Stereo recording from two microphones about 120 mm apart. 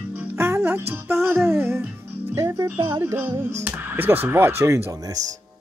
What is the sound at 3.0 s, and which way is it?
Speech, 20° right (ahead or behind).